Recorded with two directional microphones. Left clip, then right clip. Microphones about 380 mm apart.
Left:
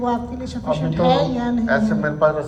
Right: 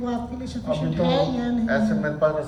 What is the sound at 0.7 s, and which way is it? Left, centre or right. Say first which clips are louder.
Music: left 5 dB; centre.